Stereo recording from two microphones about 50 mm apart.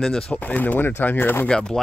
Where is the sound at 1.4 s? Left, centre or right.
Centre.